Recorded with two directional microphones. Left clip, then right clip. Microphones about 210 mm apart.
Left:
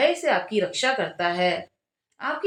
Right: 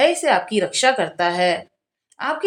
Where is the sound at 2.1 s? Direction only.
50° right (ahead or behind).